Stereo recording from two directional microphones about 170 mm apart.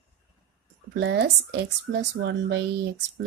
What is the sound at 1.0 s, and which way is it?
Speech, 80° right.